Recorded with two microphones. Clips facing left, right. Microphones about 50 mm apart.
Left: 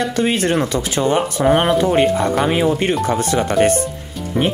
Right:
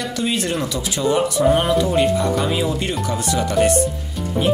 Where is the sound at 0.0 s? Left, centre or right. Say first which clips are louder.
Left 5 dB; left.